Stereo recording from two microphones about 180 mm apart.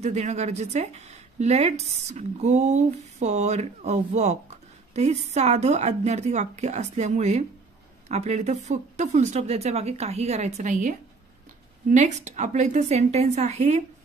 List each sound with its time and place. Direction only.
0.0 s speech: 40° right (ahead or behind)